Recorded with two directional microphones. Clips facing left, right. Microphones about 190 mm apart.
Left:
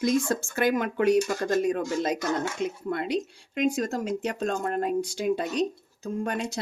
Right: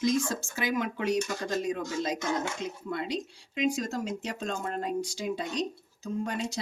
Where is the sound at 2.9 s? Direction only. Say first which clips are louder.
Left 2 dB; 55° left (ahead or behind).